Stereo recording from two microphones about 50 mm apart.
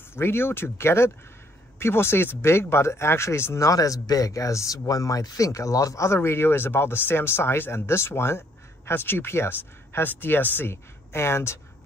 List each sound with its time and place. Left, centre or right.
0.1 s speech: left
3.5 s speech: left
10.7 s speech: left